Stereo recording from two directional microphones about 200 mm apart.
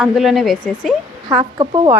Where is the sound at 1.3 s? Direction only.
25° right (ahead or behind).